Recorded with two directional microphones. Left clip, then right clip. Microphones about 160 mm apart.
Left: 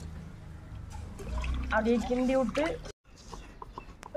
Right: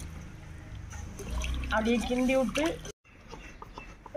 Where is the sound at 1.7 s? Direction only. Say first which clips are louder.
Left 1 dB; 5° right (ahead or behind).